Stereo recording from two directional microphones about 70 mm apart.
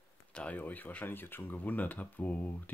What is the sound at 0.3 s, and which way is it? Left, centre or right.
Speech, centre.